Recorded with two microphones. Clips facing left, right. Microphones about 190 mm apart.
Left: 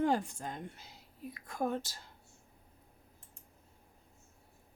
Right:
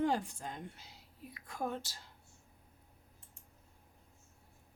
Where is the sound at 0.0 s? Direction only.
45° left (ahead or behind).